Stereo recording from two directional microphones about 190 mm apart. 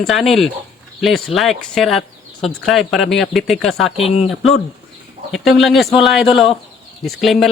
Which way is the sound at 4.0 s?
30° left (ahead or behind).